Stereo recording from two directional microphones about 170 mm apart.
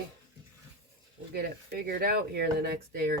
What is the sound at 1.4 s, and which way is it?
Speech, 65° right (ahead or behind).